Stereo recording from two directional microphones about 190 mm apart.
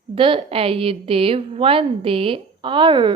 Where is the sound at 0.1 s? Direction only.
30° right (ahead or behind).